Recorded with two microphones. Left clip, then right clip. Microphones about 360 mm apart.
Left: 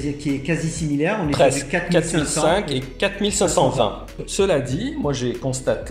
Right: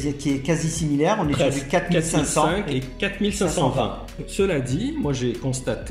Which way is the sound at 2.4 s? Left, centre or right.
Centre.